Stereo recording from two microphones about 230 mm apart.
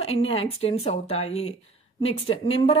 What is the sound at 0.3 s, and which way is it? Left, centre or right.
Speech, left.